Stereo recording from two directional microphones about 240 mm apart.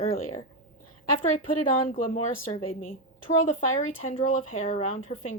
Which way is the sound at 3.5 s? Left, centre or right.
Left.